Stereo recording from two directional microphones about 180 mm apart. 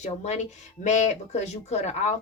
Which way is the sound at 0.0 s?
40° left (ahead or behind).